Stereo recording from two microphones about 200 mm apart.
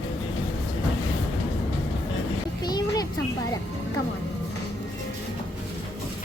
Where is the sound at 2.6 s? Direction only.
20° left (ahead or behind).